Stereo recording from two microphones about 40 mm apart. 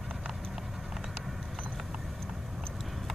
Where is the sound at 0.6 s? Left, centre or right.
Centre.